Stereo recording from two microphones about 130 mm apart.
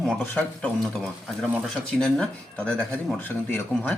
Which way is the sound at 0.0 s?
5° left (ahead or behind).